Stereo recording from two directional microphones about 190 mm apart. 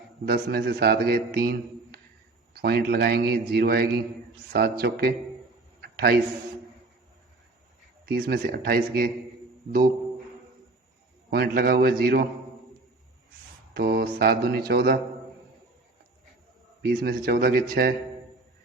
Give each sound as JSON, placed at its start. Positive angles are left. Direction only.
{"t": 0.3, "sound": "a man's voice", "side_deg": -60}
{"t": 5.8, "sound": "a sound", "side_deg": -55}
{"t": 8.0, "sound": "speech", "side_deg": -55}
{"t": 11.3, "sound": "speech", "side_deg": -55}
{"t": 13.7, "sound": "speech", "side_deg": -55}
{"t": 16.8, "sound": "speech", "side_deg": -55}